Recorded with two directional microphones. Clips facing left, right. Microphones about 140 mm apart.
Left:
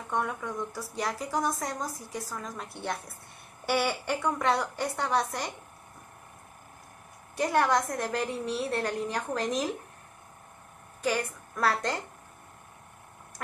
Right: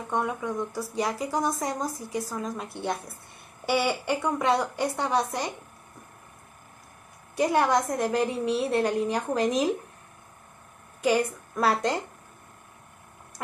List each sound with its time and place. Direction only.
0.1 s speech: 10° right (ahead or behind)
7.3 s speech: 15° right (ahead or behind)
11.0 s speech: 15° right (ahead or behind)